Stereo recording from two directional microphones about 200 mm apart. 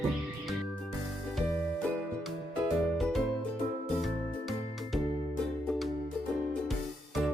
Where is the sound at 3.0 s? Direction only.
Centre (ahead or behind).